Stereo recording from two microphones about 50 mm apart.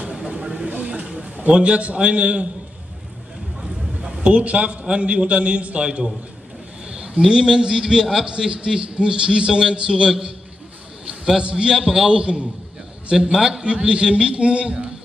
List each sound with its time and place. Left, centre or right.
0.1 s vehicle: centre
0.7 s a sound: right
1.6 s a man's voice: right
3.6 s a man's voice: centre
7.2 s a man's voice: centre
11.3 s a man's voice: centre
12.2 s a man's voice: centre